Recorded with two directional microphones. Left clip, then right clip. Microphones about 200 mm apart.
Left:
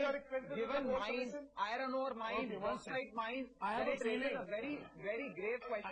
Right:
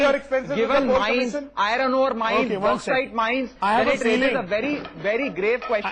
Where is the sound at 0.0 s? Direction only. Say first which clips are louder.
Right 18 dB; 30° left (ahead or behind).